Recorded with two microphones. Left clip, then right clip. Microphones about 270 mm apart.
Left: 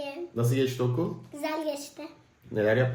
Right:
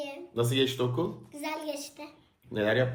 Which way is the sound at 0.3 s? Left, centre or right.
Centre.